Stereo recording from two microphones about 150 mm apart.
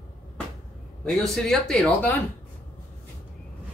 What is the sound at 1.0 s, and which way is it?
Speech, 5° left (ahead or behind).